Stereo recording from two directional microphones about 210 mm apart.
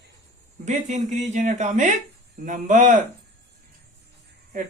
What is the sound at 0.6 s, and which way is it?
A woman's voice, 35° right (ahead or behind).